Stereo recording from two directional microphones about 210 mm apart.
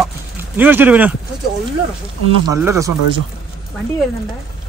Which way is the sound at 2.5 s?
15° right (ahead or behind).